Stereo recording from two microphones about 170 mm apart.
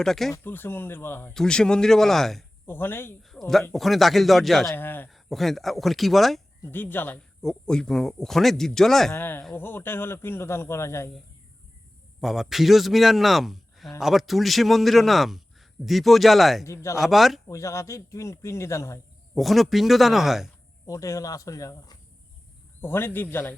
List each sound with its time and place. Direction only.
0.0 s a man's voice: centre (ahead or behind)
0.3 s a man's voice: 10° left (ahead or behind)
2.6 s speech: 10° left (ahead or behind)
3.2 s a man's voice: centre (ahead or behind)
4.7 s speech: 10° left (ahead or behind)
5.1 s a man's voice: centre (ahead or behind)
6.6 s a man's voice: 10° left (ahead or behind)
12.2 s a man's voice: centre (ahead or behind)
16.6 s speech: 15° left (ahead or behind)
17.0 s a man's voice: centre (ahead or behind)
17.5 s speech: 15° left (ahead or behind)
19.3 s a man's voice: centre (ahead or behind)
20.8 s speech: 20° left (ahead or behind)